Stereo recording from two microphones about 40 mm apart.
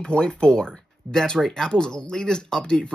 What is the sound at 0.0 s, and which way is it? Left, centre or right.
Speech, left.